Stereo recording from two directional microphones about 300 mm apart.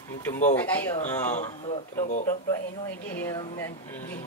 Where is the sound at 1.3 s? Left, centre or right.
Left.